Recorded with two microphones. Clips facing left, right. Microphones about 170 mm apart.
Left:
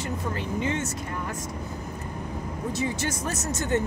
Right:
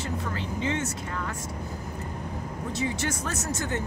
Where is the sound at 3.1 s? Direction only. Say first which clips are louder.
Left 1 dB; 20° left (ahead or behind).